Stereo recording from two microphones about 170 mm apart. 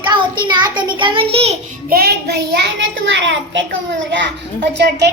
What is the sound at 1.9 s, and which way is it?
A child's voice, 65° right (ahead or behind).